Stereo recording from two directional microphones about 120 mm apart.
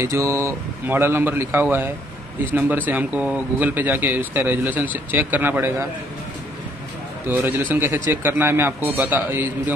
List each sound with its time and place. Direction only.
0.0 s a man's voice: 25° right (ahead or behind)
7.2 s a man's voice: 15° right (ahead or behind)